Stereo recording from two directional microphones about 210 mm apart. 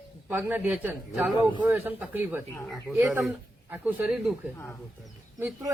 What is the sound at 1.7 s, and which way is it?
A man's voice, 10° right (ahead or behind).